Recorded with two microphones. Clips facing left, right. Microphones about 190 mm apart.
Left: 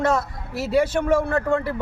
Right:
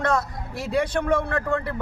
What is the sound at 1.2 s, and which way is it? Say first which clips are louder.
Speech: left 4 dB; 25° left (ahead or behind).